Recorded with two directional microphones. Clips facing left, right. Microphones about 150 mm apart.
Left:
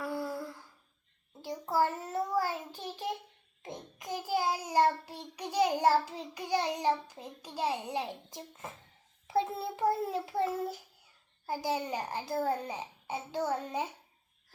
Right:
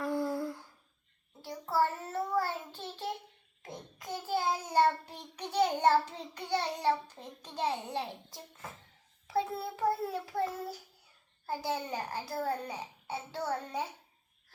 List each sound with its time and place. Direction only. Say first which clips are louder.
0.0 s humming: right 3 dB; 5° left (ahead or behind)
1.5 s a child's voice: left 1 dB; 15° left (ahead or behind)
11.4 s a child's voice: left 2 dB; 10° left (ahead or behind)